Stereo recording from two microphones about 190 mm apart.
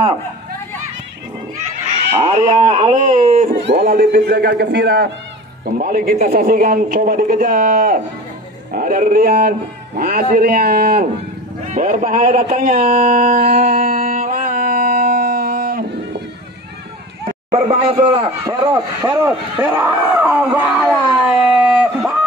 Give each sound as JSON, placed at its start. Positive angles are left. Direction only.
{"t": 2.2, "sound": "speech", "side_deg": -35}
{"t": 3.6, "sound": "speech", "side_deg": -55}
{"t": 5.8, "sound": "a man's voice", "side_deg": -50}
{"t": 13.5, "sound": "music", "side_deg": -35}
{"t": 17.5, "sound": "a man's voice", "side_deg": -30}
{"t": 20.0, "sound": "a sound", "side_deg": -5}